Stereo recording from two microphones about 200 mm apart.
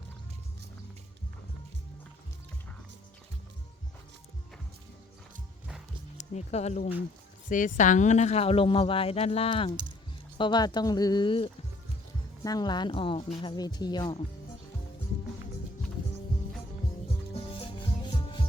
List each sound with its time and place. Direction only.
6.1 s a woman's voice: 35° left (ahead or behind)
17.3 s rub: 25° left (ahead or behind)